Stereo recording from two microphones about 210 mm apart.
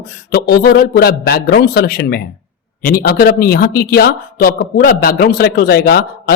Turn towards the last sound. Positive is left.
turn(degrees=50)  # may be behind; listen again after turning